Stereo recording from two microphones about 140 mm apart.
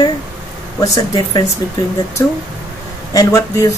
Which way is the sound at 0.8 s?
25° left (ahead or behind).